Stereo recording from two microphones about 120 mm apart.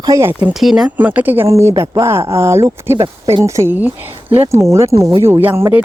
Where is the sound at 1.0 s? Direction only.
15° right (ahead or behind).